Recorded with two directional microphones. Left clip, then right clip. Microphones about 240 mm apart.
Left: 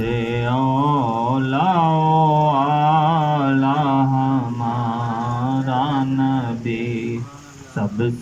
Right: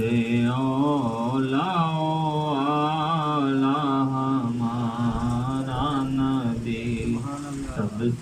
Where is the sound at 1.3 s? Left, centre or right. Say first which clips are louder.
Left 5 dB; left.